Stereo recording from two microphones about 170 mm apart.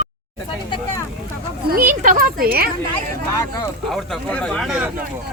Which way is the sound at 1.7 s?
55° right (ahead or behind).